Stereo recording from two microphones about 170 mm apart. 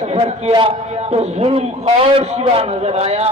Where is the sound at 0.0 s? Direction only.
40° right (ahead or behind).